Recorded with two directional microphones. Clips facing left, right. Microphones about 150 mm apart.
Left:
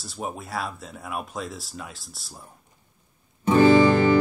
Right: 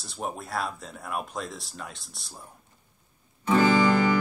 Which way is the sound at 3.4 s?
25° left (ahead or behind).